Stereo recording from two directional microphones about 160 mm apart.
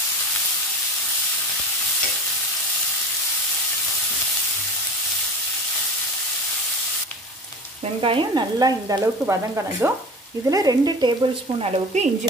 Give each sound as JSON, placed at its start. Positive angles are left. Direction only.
{"t": 7.8, "sound": "frying", "side_deg": -35}
{"t": 11.6, "sound": "stir", "side_deg": -40}